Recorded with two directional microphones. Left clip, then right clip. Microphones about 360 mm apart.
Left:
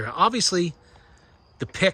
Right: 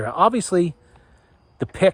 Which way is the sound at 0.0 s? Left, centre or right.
Centre.